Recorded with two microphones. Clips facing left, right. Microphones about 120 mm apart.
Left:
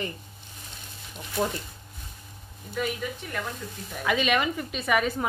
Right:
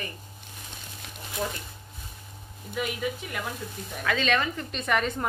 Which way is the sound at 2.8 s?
5° right (ahead or behind).